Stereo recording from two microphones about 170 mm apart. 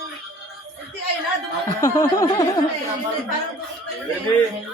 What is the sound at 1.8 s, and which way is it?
Speech, 20° left (ahead or behind).